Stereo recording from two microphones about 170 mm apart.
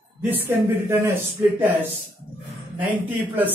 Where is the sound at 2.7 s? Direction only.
10° right (ahead or behind).